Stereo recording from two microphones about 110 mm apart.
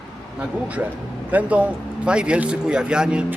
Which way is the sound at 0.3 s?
15° right (ahead or behind).